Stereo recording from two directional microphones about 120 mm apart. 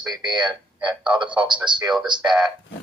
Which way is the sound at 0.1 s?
35° right (ahead or behind).